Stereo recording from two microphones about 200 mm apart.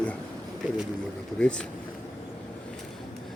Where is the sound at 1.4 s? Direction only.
5° left (ahead or behind).